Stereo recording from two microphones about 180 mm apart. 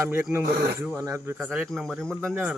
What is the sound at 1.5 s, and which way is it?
A man's voice, centre (ahead or behind).